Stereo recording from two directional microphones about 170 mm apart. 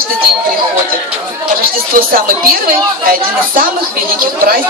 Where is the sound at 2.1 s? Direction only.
55° right (ahead or behind).